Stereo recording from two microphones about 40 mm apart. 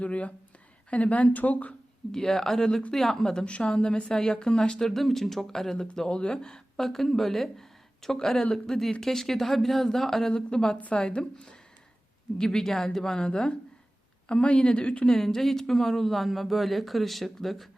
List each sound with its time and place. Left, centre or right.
0.0 s speech: left
2.1 s speech: centre
3.4 s speech: left
4.1 s speech: centre
4.8 s speech: centre
6.1 s speech: left
6.8 s speech: centre; by 11.5 s left
12.4 s speech: centre
15.0 s speech: centre